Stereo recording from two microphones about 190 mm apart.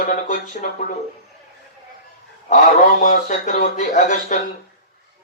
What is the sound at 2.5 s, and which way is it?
Speech, 40° left (ahead or behind).